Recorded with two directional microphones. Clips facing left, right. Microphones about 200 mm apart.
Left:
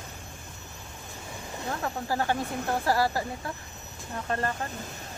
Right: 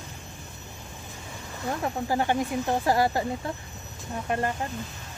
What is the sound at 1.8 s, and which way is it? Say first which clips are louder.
Speech: right 3 dB; 20° right (ahead or behind).